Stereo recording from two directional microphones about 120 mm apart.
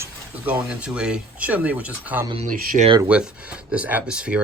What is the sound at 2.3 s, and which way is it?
Speech, 60° right (ahead or behind).